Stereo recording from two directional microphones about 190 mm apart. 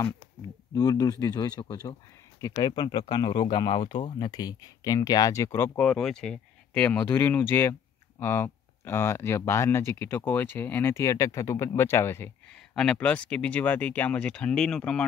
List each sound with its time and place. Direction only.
0.7 s speech: 20° left (ahead or behind); by 15.0 s 5° left (ahead or behind)